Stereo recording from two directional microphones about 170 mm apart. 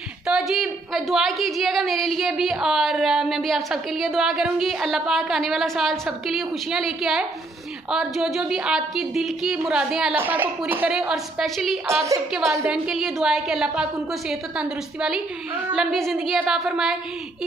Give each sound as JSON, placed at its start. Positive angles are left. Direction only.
{"t": 0.3, "sound": "a woman's voice", "side_deg": 0}
{"t": 11.9, "sound": "a woman's voice", "side_deg": -15}
{"t": 12.6, "sound": "a woman's voice", "side_deg": -5}